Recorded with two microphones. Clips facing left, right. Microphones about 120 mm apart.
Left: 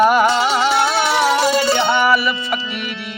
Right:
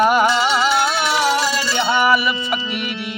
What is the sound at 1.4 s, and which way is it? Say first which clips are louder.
Music: left 6 dB; 55° left (ahead or behind).